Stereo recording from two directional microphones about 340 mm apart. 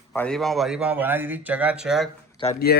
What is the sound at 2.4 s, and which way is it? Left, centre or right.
Speech, left.